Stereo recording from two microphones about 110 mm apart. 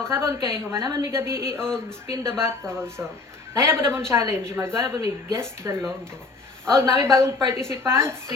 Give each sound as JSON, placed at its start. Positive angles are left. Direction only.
{"t": 0.0, "sound": "speech", "side_deg": -25}